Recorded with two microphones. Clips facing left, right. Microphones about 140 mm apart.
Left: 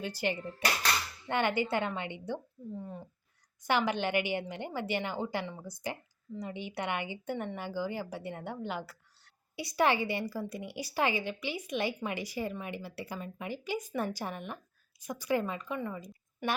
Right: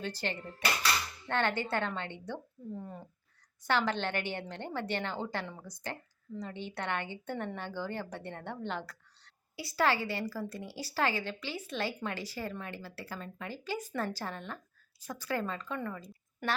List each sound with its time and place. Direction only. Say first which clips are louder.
0.0 s speech: left 3 dB; 10° left (ahead or behind)
2.7 s speech: left 2 dB; centre (ahead or behind)
3.6 s speech: left 1 dB; 15° left (ahead or behind)
9.6 s speech: left 2 dB; 20° left (ahead or behind)